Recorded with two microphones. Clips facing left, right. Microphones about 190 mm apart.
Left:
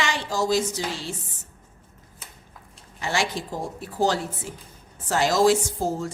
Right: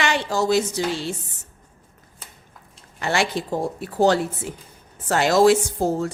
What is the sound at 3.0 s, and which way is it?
A woman's voice, 65° right (ahead or behind).